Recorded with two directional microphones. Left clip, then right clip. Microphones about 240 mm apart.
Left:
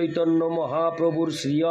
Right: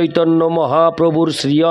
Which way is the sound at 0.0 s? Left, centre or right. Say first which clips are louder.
Right 9 dB; right.